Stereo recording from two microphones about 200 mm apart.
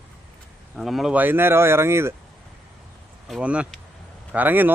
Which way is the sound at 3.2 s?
5° right (ahead or behind).